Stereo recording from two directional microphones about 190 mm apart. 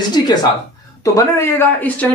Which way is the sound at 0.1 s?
20° left (ahead or behind).